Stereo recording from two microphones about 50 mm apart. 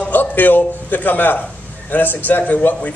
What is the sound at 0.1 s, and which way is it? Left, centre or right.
A man's voice, left.